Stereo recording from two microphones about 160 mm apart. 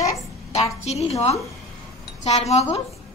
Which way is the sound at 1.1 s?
40° left (ahead or behind).